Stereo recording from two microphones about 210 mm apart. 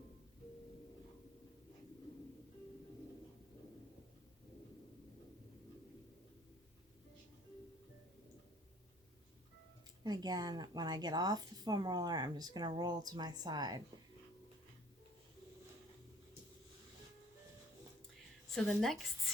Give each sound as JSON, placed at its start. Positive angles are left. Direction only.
{"t": 10.0, "sound": "speech", "side_deg": -20}
{"t": 18.5, "sound": "a woman's voice", "side_deg": 0}